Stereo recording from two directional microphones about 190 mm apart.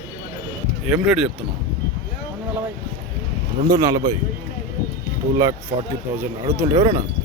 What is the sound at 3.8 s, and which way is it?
Speech, 15° right (ahead or behind).